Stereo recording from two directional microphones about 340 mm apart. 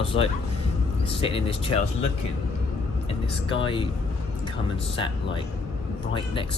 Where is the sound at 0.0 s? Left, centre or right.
Centre.